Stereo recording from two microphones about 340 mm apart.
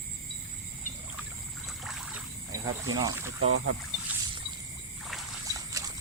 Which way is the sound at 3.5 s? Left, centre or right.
Right.